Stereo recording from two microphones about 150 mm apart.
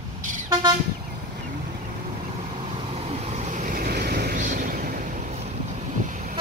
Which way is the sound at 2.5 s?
40° right (ahead or behind).